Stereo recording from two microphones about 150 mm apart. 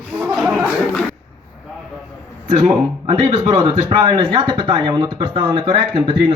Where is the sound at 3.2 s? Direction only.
30° right (ahead or behind).